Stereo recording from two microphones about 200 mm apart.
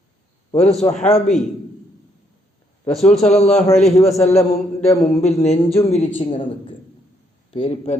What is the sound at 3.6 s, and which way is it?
Speech, 35° left (ahead or behind).